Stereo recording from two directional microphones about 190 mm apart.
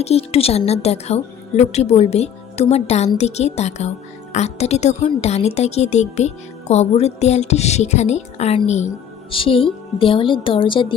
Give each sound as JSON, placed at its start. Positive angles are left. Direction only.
{"t": 0.0, "sound": "speech", "side_deg": 35}